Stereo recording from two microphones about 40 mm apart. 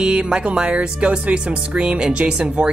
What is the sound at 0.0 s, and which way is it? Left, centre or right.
Speech, right.